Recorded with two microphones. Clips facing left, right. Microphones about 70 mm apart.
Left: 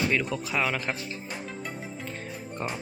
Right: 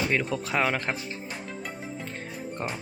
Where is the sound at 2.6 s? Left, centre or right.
Right.